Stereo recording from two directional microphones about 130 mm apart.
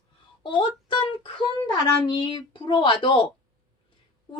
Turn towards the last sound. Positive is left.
turn(degrees=40)  # may be behind; listen again after turning